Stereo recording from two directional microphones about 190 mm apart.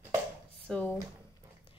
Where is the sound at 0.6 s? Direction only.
10° left (ahead or behind).